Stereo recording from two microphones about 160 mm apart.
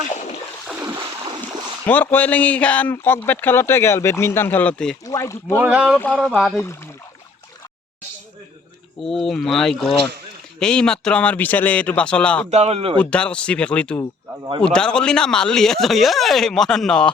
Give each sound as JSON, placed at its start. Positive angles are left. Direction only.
{"t": 0.1, "sound": "boat", "side_deg": 50}
{"t": 0.9, "sound": "a sound", "side_deg": -30}
{"t": 1.9, "sound": "speech", "side_deg": 10}
{"t": 5.0, "sound": "speech", "side_deg": 20}
{"t": 5.5, "sound": "speech", "side_deg": -10}
{"t": 9.0, "sound": "speech", "side_deg": 0}
{"t": 12.5, "sound": "speech", "side_deg": -40}
{"t": 13.0, "sound": "speech", "side_deg": 5}